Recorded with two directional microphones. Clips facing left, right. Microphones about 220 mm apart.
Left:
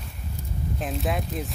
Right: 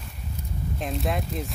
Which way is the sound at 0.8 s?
Centre (ahead or behind).